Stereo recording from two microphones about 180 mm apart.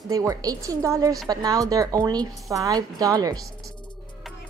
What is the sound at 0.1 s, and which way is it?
A woman's voice, 20° right (ahead or behind).